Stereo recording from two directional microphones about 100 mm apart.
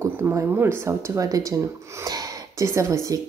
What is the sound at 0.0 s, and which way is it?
Speech, 30° right (ahead or behind).